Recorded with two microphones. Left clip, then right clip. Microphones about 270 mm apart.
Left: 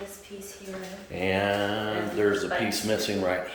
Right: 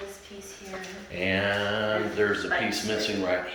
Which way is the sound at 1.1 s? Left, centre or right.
Centre.